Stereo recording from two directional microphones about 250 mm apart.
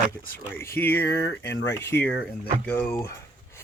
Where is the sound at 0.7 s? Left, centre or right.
Centre.